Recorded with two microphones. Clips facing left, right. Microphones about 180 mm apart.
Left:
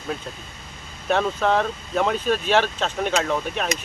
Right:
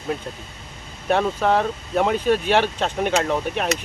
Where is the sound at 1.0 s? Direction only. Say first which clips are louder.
Right 1 dB; 10° right (ahead or behind).